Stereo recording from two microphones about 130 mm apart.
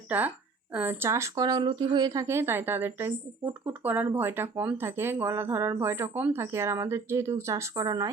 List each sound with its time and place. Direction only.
0.1 s a woman's voice: 15° right (ahead or behind)